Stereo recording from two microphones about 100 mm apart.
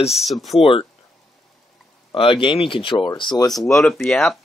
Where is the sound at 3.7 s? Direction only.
5° left (ahead or behind).